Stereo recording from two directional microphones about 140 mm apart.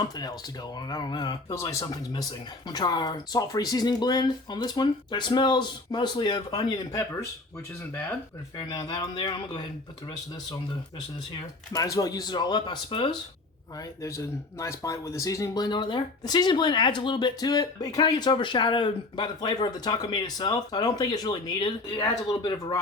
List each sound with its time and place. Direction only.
0.0 s speech: 30° left (ahead or behind)
8.5 s speech: 30° left (ahead or behind)
11.7 s speech: 25° left (ahead or behind)
14.0 s speech: 20° left (ahead or behind)